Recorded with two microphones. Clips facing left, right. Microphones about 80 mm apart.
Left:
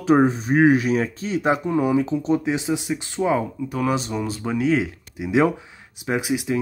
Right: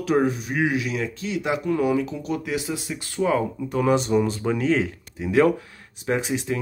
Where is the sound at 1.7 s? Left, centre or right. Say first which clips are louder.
Left 2 dB; left.